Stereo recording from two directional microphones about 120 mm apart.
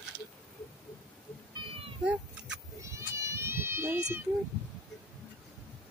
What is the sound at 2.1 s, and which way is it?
Cat, 10° right (ahead or behind).